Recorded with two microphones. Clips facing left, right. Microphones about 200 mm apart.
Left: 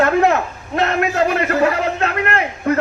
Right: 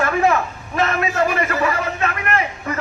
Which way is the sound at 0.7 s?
65° left (ahead or behind).